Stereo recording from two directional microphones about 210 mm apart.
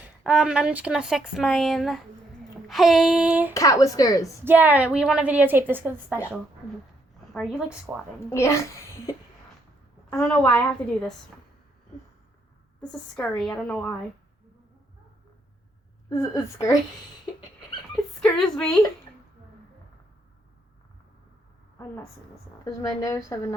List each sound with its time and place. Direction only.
0.3 s speech: 5° right (ahead or behind)
3.5 s speech: 15° left (ahead or behind)
4.4 s a woman's voice: 10° right (ahead or behind)
7.3 s speech: 5° right (ahead or behind)
8.3 s speech: 15° left (ahead or behind)
12.8 s speech: 5° left (ahead or behind)
16.0 s speech: 15° left (ahead or behind)
18.2 s a woman's voice: 5° left (ahead or behind)
22.6 s speech: 15° left (ahead or behind)